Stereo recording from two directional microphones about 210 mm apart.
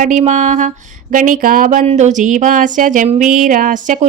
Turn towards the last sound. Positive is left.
turn(degrees=-40)  # may be behind; listen again after turning